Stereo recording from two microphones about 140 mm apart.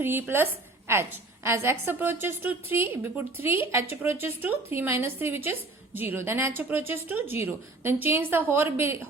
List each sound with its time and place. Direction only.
0.0 s a woman's voice: 15° right (ahead or behind)